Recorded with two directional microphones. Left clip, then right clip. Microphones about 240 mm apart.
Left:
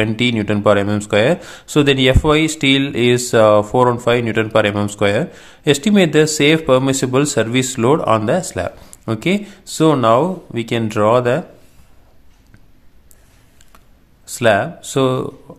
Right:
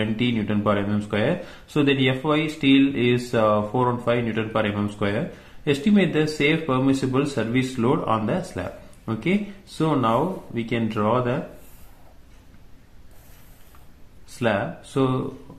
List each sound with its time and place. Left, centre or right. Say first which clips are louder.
0.0 s speech: left 8 dB; left
14.4 s speech: left 10 dB; left